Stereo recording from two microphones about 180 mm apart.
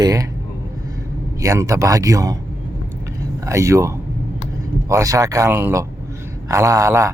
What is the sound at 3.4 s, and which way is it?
A man's voice, 15° right (ahead or behind).